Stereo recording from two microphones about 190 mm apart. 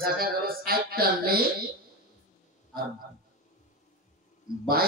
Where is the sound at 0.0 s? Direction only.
50° right (ahead or behind).